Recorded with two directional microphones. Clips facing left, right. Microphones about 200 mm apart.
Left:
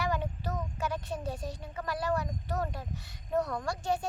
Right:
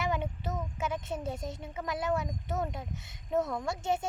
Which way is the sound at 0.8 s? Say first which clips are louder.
Even; 20° right (ahead or behind).